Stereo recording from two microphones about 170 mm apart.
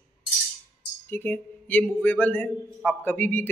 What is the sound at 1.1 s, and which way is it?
A man's voice, 10° left (ahead or behind).